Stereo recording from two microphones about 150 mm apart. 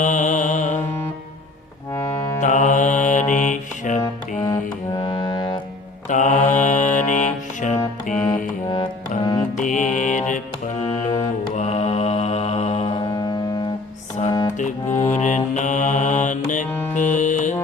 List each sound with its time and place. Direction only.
0.0 s mantra: 55° left (ahead or behind)
2.4 s music: 55° left (ahead or behind)
4.9 s music: 30° left (ahead or behind)
6.1 s mantra: 55° left (ahead or behind)
8.6 s music: 30° left (ahead or behind)
9.6 s music: 55° left (ahead or behind)
11.5 s mantra: 50° left (ahead or behind); by 13.3 s 30° left (ahead or behind)
14.3 s music: 25° left (ahead or behind)
14.8 s music: 15° left (ahead or behind)
15.1 s mantra: 55° left (ahead or behind)
16.9 s music: 55° left (ahead or behind)